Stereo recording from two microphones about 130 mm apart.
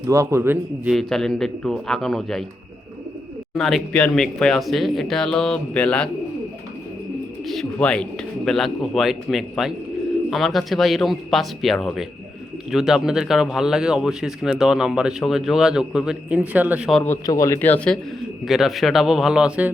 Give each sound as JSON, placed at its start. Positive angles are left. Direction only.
{"t": 0.1, "sound": "a man's voice", "side_deg": -25}
{"t": 0.9, "sound": "a man's voice", "side_deg": 0}
{"t": 3.5, "sound": "a man's voice", "side_deg": 0}
{"t": 7.4, "sound": "a man's voice", "side_deg": 0}
{"t": 17.2, "sound": "speech", "side_deg": 25}
{"t": 17.6, "sound": "a man's voice", "side_deg": 10}
{"t": 18.4, "sound": "a man's voice", "side_deg": 0}